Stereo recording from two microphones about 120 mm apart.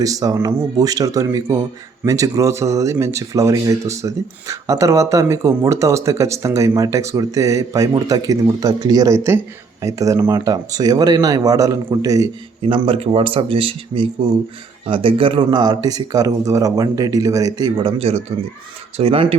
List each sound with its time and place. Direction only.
0.0 s speech: 30° right (ahead or behind)
12.6 s speech: 50° right (ahead or behind)